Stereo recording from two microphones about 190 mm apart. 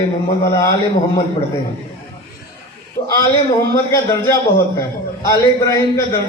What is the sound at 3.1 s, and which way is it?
A man's voice, 15° left (ahead or behind).